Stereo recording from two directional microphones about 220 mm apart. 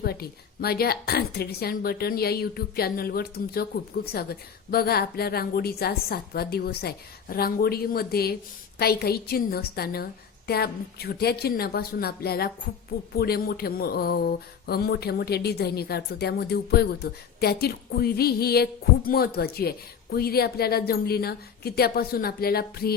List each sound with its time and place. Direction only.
0.0 s speech: 45° left (ahead or behind)